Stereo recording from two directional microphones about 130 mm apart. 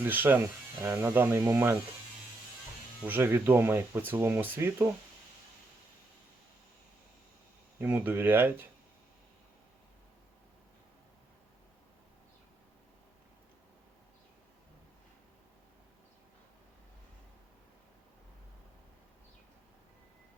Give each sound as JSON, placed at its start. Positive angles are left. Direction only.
{"t": 0.0, "sound": "speech", "side_deg": -15}
{"t": 3.0, "sound": "speech", "side_deg": -15}
{"t": 7.8, "sound": "speech", "side_deg": -15}